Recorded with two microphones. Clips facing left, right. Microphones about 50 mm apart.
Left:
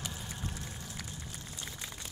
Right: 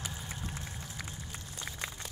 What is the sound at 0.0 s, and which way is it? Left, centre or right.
Vehicle, centre.